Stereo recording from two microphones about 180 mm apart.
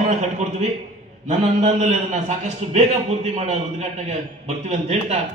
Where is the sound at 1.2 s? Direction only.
40° right (ahead or behind).